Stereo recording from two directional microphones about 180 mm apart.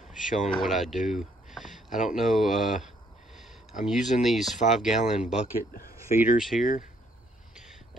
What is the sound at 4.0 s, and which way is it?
Speech, 40° left (ahead or behind).